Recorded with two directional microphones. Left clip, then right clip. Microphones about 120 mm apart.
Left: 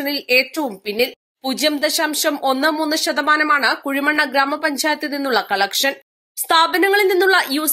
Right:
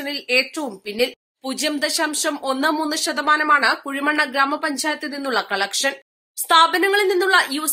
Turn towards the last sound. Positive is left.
turn(degrees=30)  # may be behind; listen again after turning